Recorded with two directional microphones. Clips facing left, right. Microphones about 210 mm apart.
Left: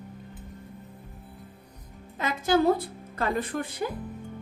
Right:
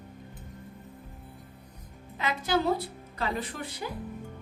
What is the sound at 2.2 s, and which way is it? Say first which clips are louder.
A woman's voice: left 4 dB; 45° left (ahead or behind).